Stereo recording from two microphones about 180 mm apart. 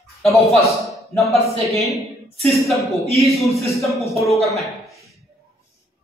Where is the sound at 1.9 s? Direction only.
15° left (ahead or behind).